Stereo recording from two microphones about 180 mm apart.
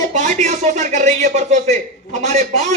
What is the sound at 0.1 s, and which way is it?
A man's voice, 40° right (ahead or behind).